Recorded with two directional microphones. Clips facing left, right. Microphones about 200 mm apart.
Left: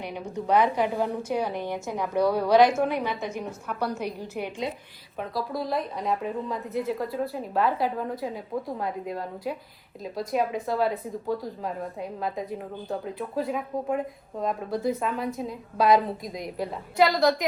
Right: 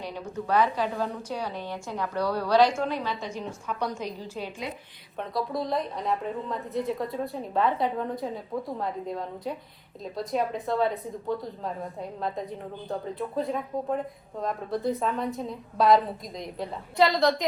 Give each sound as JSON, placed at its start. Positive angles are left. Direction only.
{"t": 0.0, "sound": "a woman's voice", "side_deg": 15}
{"t": 5.1, "sound": "a woman's voice", "side_deg": 0}